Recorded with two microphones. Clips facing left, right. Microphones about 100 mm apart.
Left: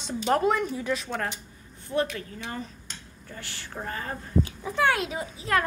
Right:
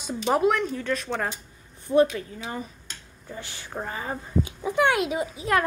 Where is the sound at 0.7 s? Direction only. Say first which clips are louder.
Right 1 dB; 15° left (ahead or behind).